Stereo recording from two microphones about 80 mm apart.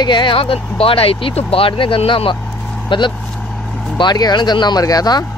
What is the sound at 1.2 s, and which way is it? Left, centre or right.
Speech, left.